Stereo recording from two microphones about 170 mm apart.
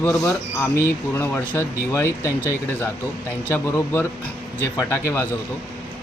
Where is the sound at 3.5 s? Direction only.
15° left (ahead or behind).